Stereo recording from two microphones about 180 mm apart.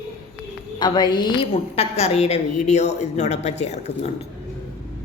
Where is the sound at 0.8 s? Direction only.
25° left (ahead or behind).